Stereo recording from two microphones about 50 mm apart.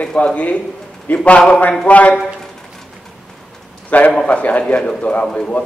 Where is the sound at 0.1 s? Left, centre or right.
Centre; by 2.1 s left.